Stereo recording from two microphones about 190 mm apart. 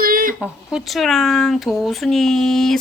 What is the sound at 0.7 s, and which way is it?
Speech, centre (ahead or behind).